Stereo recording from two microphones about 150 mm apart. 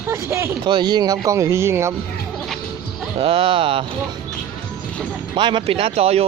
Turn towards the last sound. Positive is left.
turn(degrees=-40)  # may be behind; listen again after turning